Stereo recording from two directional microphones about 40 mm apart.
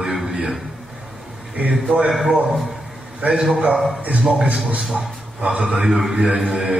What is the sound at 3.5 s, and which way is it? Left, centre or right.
Speech, right.